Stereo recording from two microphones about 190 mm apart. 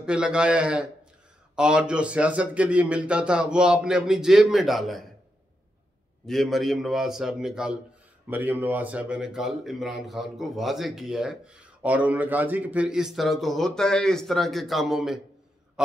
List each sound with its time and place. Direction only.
0.0 s speech: 5° right (ahead or behind)
6.2 s speech: centre (ahead or behind)